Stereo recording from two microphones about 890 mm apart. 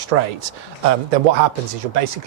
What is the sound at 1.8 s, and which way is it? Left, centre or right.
Speech, right.